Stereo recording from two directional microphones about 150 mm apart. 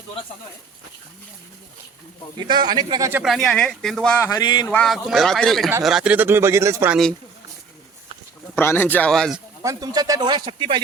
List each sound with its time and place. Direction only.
2.5 s speech: 30° right (ahead or behind)
3.2 s speech: 5° left (ahead or behind)
4.3 s a sound: 30° left (ahead or behind)
4.7 s speech: 5° left (ahead or behind); by 6.9 s 20° right (ahead or behind)
8.5 s speech: 15° left (ahead or behind)
9.6 s speech: 25° right (ahead or behind)